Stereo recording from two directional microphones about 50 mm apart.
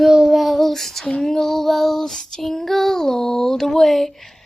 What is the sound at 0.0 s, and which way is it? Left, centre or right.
Child singing, centre.